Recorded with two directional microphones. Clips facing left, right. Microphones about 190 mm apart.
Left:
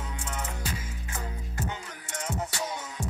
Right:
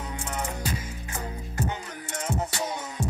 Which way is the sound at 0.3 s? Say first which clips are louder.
Right 4 dB; 40° right (ahead or behind).